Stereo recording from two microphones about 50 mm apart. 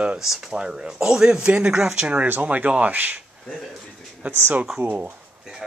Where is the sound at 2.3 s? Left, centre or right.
Right.